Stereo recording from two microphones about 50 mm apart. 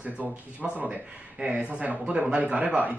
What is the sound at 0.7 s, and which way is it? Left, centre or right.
Speech, right.